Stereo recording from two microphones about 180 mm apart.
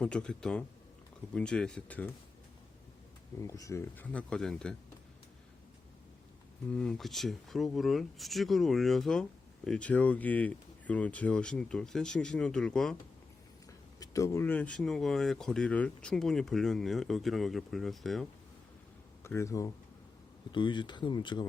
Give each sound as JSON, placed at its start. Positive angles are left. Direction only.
{"t": 0.0, "sound": "speech", "side_deg": 5}
{"t": 3.4, "sound": "speech", "side_deg": 20}
{"t": 6.7, "sound": "speech", "side_deg": 5}
{"t": 14.0, "sound": "speech", "side_deg": 20}
{"t": 19.2, "sound": "speech", "side_deg": 15}